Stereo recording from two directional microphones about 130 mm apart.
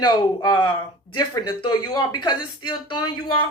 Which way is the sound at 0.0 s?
30° left (ahead or behind).